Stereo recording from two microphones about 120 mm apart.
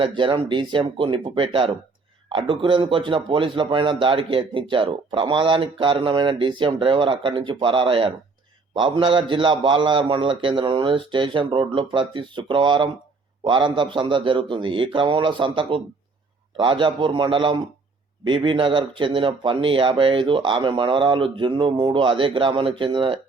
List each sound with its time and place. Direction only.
0.0 s speech: 40° right (ahead or behind)